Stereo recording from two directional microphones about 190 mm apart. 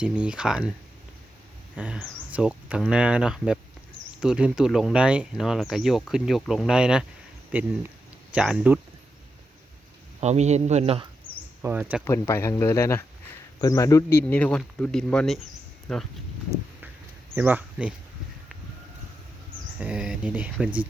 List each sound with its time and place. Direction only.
0.0 s speech: 5° right (ahead or behind)
1.7 s speech: 5° right (ahead or behind)
10.2 s speech: 35° right (ahead or behind)
11.6 s speech: 10° right (ahead or behind)
12.0 s speech: 15° left (ahead or behind)
17.3 s speech: 10° right (ahead or behind)
19.8 s speech: 5° right (ahead or behind)